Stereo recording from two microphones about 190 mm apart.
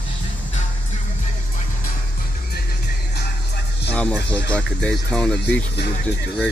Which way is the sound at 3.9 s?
5° left (ahead or behind).